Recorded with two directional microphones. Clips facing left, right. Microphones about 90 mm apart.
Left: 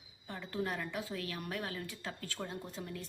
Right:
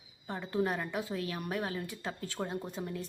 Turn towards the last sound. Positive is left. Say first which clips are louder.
# right 5 dB
turn(degrees=-20)  # may be behind; listen again after turning